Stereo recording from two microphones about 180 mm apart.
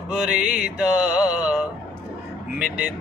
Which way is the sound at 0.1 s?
5° right (ahead or behind).